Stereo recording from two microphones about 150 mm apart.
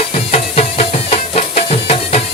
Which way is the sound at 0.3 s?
45° left (ahead or behind).